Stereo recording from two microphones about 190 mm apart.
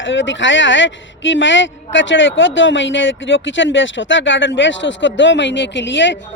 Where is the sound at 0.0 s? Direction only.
80° left.